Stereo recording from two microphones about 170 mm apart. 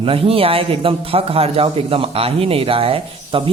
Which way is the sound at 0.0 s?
35° right (ahead or behind).